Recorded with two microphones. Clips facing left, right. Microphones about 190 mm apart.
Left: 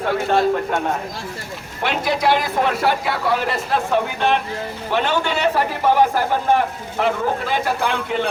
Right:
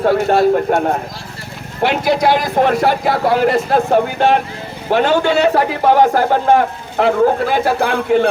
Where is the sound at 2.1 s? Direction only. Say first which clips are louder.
Right 2 dB; 40° right (ahead or behind); by 7.6 s 60° right (ahead or behind).